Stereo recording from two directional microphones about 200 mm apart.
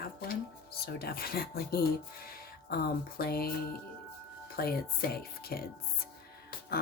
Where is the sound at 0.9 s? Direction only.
50° left (ahead or behind).